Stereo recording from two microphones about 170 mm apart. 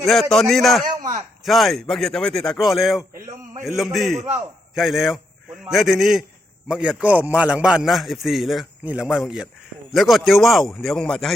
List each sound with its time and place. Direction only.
0.0 s a man's voice: centre (ahead or behind)
0.9 s a man's voice: 25° right (ahead or behind)
1.5 s a man's voice: centre (ahead or behind)